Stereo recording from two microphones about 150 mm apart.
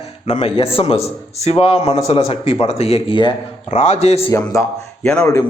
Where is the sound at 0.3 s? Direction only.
45° left (ahead or behind).